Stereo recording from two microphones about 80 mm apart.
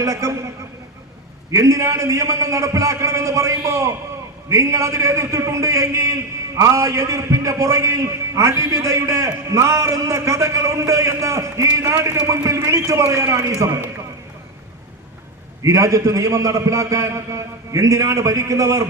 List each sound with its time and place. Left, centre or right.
0.0 s a man's voice: right
1.5 s a man's voice: right
15.6 s a man's voice: right